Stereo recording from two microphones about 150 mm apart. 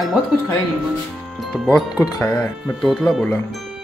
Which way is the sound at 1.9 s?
25° left (ahead or behind).